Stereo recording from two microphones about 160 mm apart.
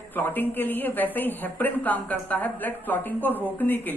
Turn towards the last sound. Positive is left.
turn(degrees=10)  # may be behind; listen again after turning